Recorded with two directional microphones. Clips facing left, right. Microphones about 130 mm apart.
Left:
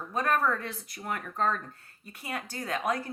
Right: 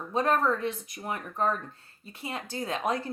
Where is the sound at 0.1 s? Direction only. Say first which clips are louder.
Right 2 dB; 25° right (ahead or behind).